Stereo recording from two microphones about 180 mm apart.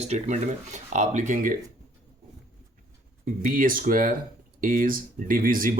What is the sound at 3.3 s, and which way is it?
Speech, 50° right (ahead or behind).